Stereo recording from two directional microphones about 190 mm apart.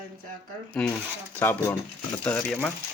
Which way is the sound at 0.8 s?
5° left (ahead or behind).